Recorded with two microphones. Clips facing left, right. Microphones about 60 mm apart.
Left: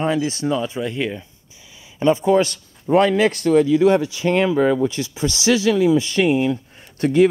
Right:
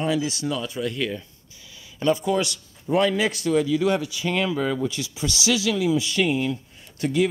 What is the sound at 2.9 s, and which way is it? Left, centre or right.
Speech, left.